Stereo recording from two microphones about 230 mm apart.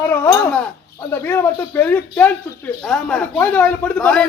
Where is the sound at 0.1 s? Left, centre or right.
Centre.